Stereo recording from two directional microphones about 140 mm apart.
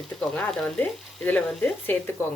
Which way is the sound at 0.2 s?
Centre (ahead or behind).